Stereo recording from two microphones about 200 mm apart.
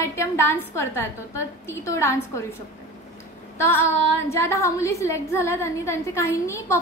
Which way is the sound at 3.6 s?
10° left (ahead or behind).